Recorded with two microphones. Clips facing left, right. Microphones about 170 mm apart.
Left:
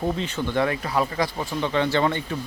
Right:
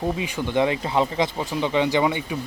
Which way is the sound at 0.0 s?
10° right (ahead or behind).